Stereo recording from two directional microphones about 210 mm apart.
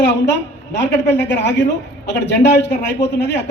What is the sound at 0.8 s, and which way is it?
Speech, 55° left (ahead or behind).